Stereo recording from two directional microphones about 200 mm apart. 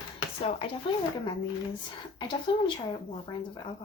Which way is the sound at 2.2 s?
25° left (ahead or behind).